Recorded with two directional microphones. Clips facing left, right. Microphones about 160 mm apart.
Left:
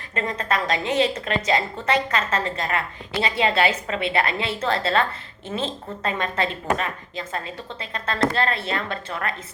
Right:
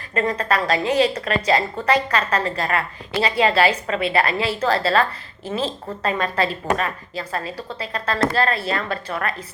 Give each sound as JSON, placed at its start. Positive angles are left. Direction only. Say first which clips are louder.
{"t": 0.1, "sound": "a woman's voice", "louder": "right 4 dB", "side_deg": 25}